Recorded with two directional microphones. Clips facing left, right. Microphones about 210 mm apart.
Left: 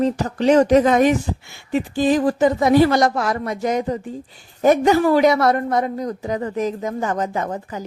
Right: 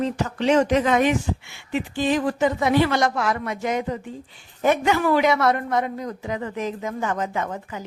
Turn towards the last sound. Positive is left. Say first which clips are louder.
# left 3 dB
turn(degrees=35)  # may be behind; listen again after turning